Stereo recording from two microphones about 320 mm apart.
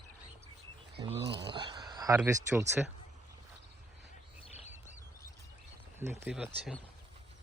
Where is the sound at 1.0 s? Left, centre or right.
Centre.